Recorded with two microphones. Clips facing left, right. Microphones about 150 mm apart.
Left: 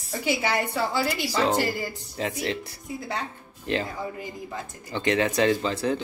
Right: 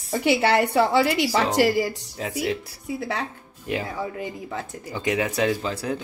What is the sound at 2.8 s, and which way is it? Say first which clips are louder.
Speech: right 5 dB; 75° right (ahead or behind).